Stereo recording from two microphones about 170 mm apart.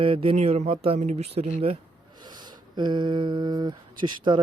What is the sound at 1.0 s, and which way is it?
Speech, 45° right (ahead or behind).